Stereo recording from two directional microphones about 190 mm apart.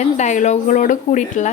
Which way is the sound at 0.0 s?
40° left (ahead or behind).